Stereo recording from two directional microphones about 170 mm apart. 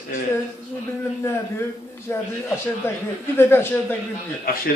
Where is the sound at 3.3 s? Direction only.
15° left (ahead or behind).